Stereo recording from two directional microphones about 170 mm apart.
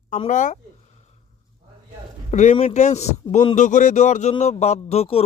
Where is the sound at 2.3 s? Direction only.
40° left (ahead or behind).